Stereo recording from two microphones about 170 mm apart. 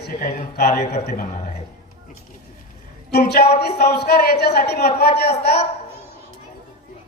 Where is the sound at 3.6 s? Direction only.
70° left (ahead or behind).